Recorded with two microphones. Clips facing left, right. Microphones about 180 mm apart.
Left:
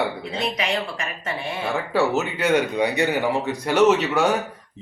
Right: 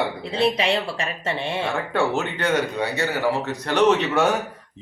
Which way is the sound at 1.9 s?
5° left (ahead or behind).